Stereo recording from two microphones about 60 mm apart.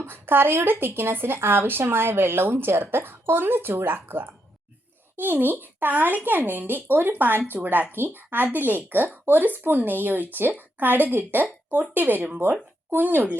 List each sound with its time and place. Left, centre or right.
0.0 s speech: right